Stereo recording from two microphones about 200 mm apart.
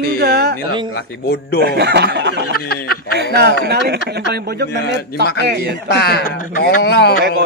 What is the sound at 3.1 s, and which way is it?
Speech, 55° right (ahead or behind).